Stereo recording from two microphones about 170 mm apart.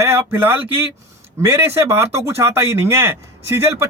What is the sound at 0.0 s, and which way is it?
Speech, 15° right (ahead or behind).